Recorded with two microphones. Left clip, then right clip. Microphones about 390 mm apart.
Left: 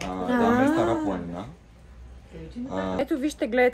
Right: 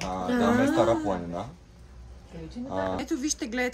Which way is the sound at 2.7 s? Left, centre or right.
Centre.